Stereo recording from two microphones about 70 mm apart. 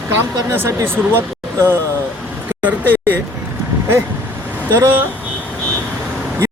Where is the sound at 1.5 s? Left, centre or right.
Right.